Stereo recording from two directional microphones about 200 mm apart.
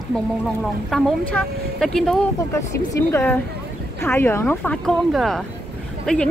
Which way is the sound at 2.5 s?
15° left (ahead or behind).